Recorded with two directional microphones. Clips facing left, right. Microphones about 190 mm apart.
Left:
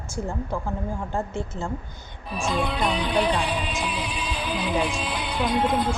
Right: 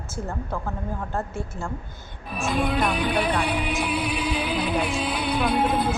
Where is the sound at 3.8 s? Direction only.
65° right (ahead or behind).